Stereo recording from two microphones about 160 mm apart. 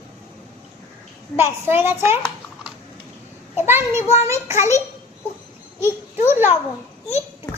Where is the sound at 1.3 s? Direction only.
15° right (ahead or behind).